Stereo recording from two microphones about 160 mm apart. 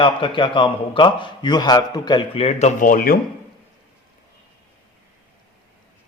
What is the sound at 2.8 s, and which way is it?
Speech, 60° left (ahead or behind).